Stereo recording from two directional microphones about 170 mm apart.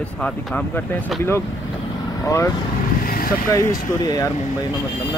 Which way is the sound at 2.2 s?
15° left (ahead or behind).